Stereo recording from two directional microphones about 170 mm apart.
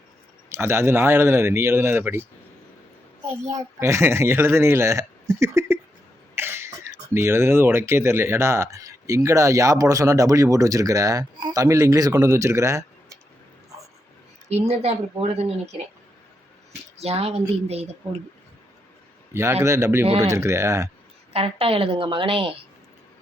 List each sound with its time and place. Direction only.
0.5 s speech: 15° right (ahead or behind)
3.8 s speech: 15° right (ahead or behind)
14.5 s a woman's voice: 40° right (ahead or behind)
17.0 s a woman's voice: 35° right (ahead or behind)
19.3 s a man's voice: 15° right (ahead or behind)
21.3 s a woman's voice: 35° right (ahead or behind)